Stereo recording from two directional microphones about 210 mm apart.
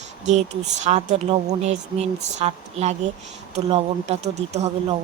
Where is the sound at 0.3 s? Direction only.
35° right (ahead or behind).